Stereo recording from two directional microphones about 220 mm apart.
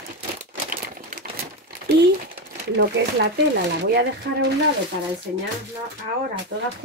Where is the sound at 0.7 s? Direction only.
40° right (ahead or behind).